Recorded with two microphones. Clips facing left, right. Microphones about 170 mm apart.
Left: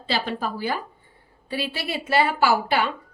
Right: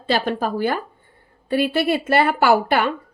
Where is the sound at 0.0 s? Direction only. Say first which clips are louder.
Right 5 dB; 50° right (ahead or behind).